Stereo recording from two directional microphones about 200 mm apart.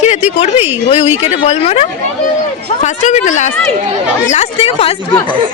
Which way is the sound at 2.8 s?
40° left (ahead or behind).